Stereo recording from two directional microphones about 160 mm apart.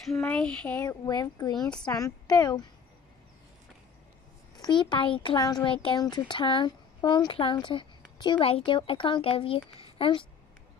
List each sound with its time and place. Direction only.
0.2 s speech: 5° left (ahead or behind)
0.8 s a woman's voice: 25° left (ahead or behind)
1.6 s a woman's voice: 5° left (ahead or behind)
1.9 s a woman's voice: 25° left (ahead or behind)
4.6 s a woman's voice: 25° left (ahead or behind)